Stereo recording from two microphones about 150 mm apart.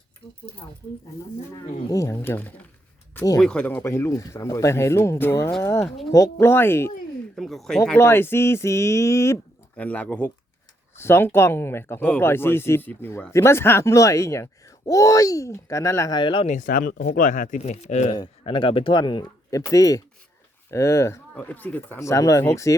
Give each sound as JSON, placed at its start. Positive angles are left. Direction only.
{"t": 1.9, "sound": "speech", "side_deg": 20}
{"t": 7.3, "sound": "speech", "side_deg": 0}
{"t": 7.9, "sound": "speech", "side_deg": 15}
{"t": 9.7, "sound": "speech", "side_deg": 10}
{"t": 16.1, "sound": "speech", "side_deg": 35}
{"t": 16.5, "sound": "speech", "side_deg": 60}
{"t": 18.1, "sound": "speech", "side_deg": 30}